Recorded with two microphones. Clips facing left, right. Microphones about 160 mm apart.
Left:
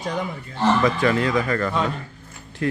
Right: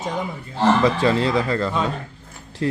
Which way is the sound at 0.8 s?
30° right (ahead or behind).